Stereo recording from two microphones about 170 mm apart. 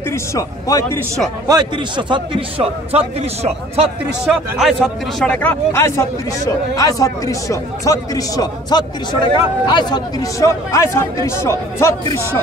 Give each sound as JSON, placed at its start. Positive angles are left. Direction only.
{"t": 0.3, "sound": "speech", "side_deg": 20}
{"t": 1.5, "sound": "a man's voice", "side_deg": -25}
{"t": 4.3, "sound": "speech", "side_deg": 0}